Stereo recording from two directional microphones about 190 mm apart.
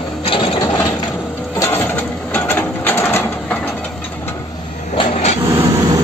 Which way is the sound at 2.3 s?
10° left (ahead or behind).